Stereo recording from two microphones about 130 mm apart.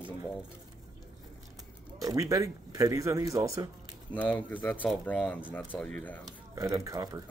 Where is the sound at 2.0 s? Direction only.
25° right (ahead or behind).